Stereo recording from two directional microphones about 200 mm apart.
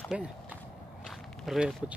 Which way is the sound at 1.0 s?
Centre (ahead or behind).